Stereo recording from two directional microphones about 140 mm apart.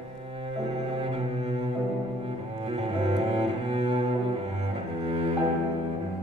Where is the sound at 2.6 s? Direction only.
45° right (ahead or behind).